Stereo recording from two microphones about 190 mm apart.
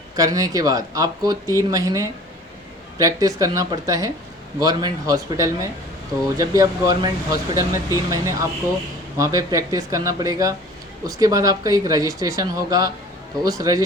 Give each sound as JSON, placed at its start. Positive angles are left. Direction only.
{"t": 0.2, "sound": "speech", "side_deg": -20}